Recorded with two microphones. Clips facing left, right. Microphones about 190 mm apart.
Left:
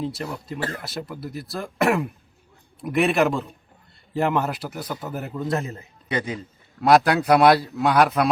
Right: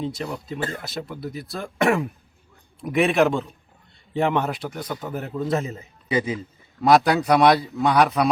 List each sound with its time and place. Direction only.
0.0 s a man's voice: centre (ahead or behind)